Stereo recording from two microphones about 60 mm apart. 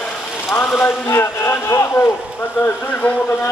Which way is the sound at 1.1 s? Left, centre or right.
Left.